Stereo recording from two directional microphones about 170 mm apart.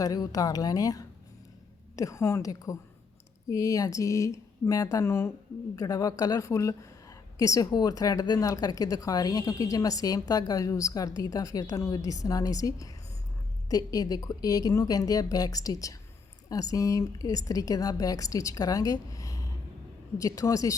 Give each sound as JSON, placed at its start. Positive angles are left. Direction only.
{"t": 0.0, "sound": "speech", "side_deg": 20}